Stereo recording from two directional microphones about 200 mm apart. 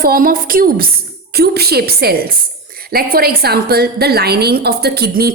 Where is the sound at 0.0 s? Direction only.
45° right (ahead or behind).